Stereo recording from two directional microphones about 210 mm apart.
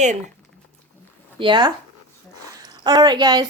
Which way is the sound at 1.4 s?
20° right (ahead or behind).